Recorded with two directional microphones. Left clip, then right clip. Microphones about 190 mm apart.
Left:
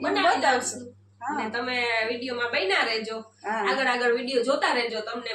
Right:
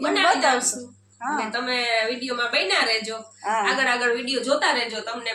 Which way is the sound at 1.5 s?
Centre (ahead or behind).